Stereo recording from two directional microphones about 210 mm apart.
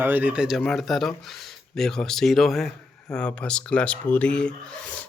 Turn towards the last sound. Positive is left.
turn(degrees=5)  # may be behind; listen again after turning